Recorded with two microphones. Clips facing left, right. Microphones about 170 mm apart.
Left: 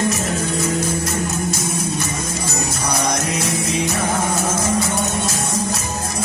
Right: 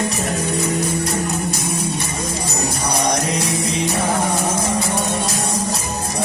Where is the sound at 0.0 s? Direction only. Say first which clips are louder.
Left 1 dB; 35° right (ahead or behind).